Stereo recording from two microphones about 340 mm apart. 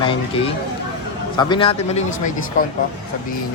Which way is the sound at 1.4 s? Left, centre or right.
Centre.